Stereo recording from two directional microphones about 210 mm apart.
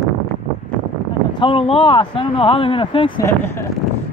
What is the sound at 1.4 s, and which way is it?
Speech, 25° left (ahead or behind).